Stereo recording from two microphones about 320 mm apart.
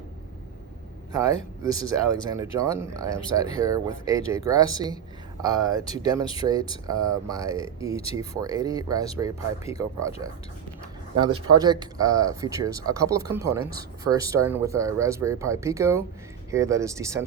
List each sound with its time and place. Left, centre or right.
1.1 s speech: centre
7.9 s speech: centre
8.3 s speech: centre
11.2 s speech: centre